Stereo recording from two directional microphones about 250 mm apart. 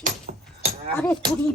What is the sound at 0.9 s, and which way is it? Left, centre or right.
Speech, centre.